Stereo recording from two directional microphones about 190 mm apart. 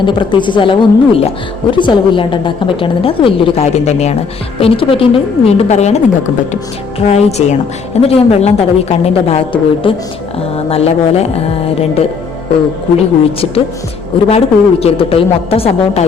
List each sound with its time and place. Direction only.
0.0 s a woman's voice: 25° left (ahead or behind)
7.0 s a woman's voice: 35° left (ahead or behind)